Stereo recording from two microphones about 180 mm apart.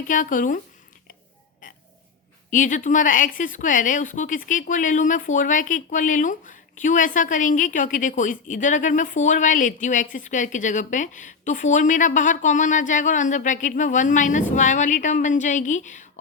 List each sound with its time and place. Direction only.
0.1 s a woman's voice: 45° left (ahead or behind)
1.6 s a sound: 50° left (ahead or behind)
2.5 s a woman's voice: 45° left (ahead or behind)